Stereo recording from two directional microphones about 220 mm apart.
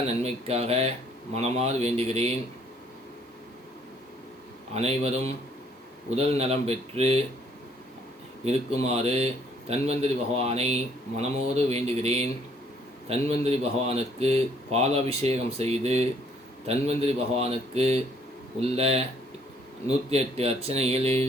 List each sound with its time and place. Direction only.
0.2 s speech: 25° right (ahead or behind)
4.7 s speech: 30° right (ahead or behind)
8.9 s speech: 25° right (ahead or behind)
20.1 s speech: 25° right (ahead or behind)